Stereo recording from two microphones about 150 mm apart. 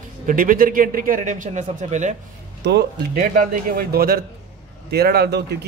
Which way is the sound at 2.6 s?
85° right.